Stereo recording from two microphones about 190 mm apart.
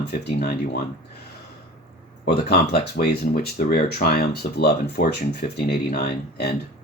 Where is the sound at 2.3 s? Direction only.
55° left (ahead or behind).